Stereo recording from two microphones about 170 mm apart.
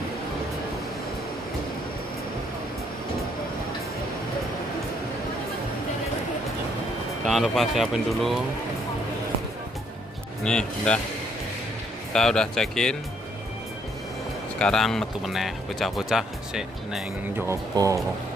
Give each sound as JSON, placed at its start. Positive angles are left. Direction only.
{"t": 7.2, "sound": "speech", "side_deg": 0}
{"t": 10.4, "sound": "speech", "side_deg": 5}
{"t": 12.1, "sound": "speech", "side_deg": 5}
{"t": 14.6, "sound": "speech", "side_deg": 5}
{"t": 17.5, "sound": "speech", "side_deg": -20}